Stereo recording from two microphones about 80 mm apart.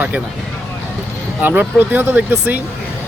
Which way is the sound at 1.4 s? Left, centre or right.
Right.